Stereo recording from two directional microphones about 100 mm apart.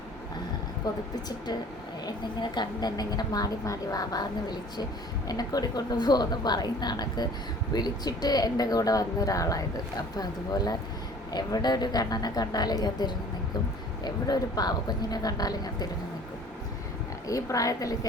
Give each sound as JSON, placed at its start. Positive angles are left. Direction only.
{"t": 2.0, "sound": "a woman's voice", "side_deg": 45}
{"t": 17.2, "sound": "speech", "side_deg": 35}